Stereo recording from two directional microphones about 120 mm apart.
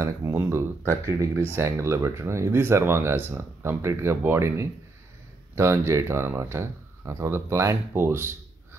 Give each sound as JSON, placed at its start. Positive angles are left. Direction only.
{"t": 0.0, "sound": "speech", "side_deg": -20}